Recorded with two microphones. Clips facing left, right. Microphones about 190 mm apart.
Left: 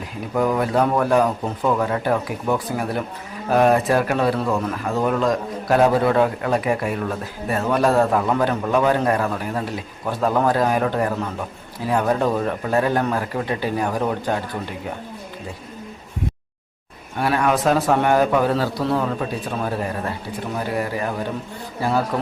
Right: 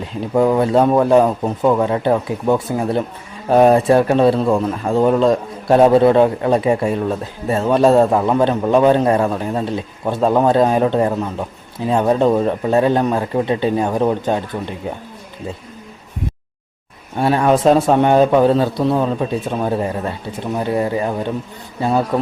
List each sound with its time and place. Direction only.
0.0 s speech: 25° right (ahead or behind)
17.2 s speech: 25° right (ahead or behind)